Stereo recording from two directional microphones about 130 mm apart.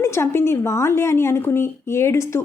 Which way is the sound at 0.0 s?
20° left (ahead or behind).